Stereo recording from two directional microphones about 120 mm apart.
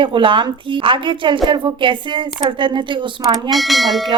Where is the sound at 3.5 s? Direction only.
Centre (ahead or behind).